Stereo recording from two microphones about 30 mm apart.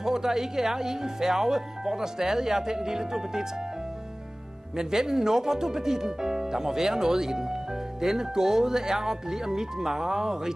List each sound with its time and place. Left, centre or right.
0.0 s speech: centre
4.7 s speech: centre